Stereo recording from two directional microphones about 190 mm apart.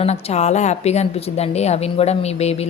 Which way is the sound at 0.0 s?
35° left (ahead or behind).